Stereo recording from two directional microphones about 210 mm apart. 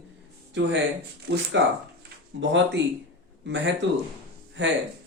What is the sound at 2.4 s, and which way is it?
Speech, 60° right (ahead or behind).